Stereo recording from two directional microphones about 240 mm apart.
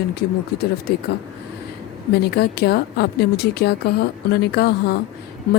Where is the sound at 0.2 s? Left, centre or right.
Left.